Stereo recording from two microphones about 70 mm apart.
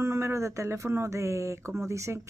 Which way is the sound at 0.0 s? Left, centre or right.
Right.